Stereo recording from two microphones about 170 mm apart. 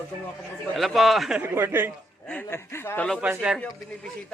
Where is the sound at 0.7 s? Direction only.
Centre (ahead or behind).